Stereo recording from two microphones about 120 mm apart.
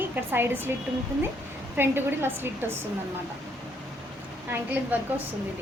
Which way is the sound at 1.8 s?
20° right (ahead or behind).